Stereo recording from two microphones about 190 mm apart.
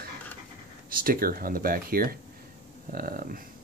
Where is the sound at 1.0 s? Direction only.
50° right (ahead or behind).